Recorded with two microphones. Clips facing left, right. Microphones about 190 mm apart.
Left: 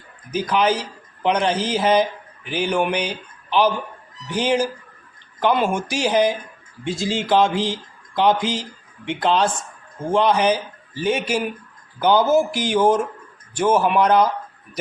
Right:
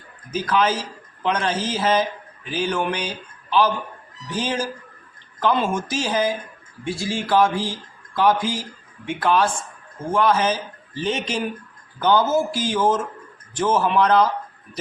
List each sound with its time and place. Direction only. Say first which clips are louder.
0.3 s a man's voice: left 1 dB; 15° left (ahead or behind)